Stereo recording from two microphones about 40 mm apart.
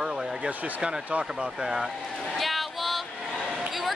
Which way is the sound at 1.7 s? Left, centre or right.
Centre.